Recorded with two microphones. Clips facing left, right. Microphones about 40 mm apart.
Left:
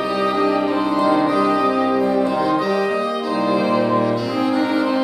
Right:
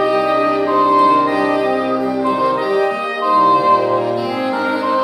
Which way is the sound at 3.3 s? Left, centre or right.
Centre.